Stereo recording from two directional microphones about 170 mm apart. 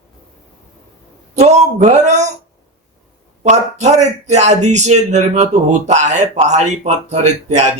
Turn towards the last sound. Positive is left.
turn(degrees=-40)  # may be behind; listen again after turning